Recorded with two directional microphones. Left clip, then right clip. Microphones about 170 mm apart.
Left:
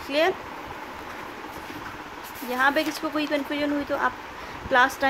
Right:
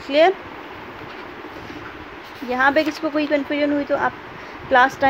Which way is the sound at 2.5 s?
15° right (ahead or behind).